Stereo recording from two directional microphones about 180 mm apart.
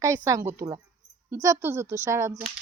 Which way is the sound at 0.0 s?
20° right (ahead or behind).